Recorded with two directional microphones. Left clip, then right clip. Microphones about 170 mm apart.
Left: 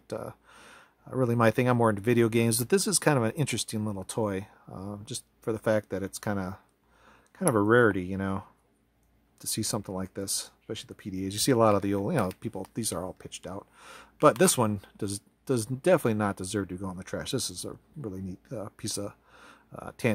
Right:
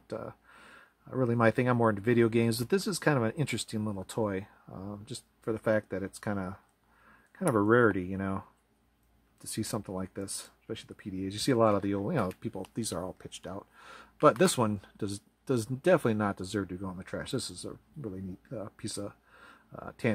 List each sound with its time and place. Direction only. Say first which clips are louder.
0.1 s speech: left 3 dB; 20° left (ahead or behind)